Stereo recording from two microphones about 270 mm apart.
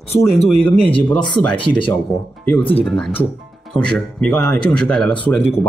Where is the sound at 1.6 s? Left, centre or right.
Centre.